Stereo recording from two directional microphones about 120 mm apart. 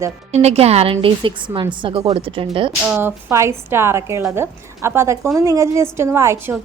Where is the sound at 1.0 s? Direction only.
45° right (ahead or behind).